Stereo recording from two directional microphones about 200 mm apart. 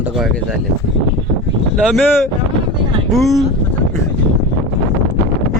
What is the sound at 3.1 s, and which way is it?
Speech, centre (ahead or behind).